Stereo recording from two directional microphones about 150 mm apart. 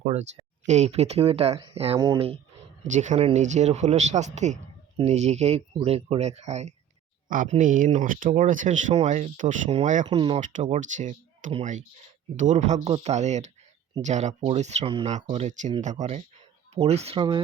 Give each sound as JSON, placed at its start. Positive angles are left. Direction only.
{"t": 0.0, "sound": "speech", "side_deg": -45}
{"t": 2.8, "sound": "speech", "side_deg": -55}
{"t": 7.3, "sound": "speech", "side_deg": -65}
{"t": 10.1, "sound": "speech", "side_deg": -40}
{"t": 10.4, "sound": "speech", "side_deg": -50}